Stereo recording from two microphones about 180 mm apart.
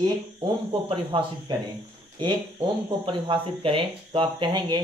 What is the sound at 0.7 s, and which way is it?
Speech, 30° right (ahead or behind).